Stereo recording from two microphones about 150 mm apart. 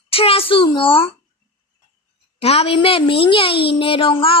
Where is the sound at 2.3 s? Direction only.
40° left (ahead or behind).